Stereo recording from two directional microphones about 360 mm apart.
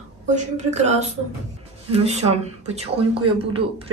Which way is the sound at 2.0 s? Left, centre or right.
Centre.